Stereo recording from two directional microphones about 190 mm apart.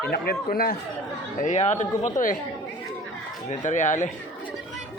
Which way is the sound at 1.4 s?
40° left (ahead or behind).